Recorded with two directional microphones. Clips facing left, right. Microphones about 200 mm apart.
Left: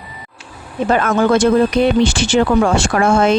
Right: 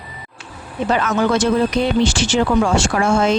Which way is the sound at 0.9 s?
50° left (ahead or behind).